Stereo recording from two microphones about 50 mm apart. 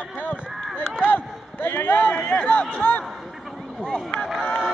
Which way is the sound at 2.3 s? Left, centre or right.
Left.